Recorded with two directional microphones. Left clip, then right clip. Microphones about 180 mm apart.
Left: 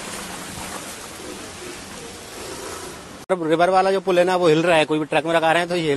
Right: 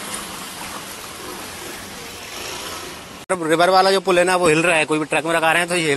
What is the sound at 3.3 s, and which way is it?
A man's voice, 5° left (ahead or behind).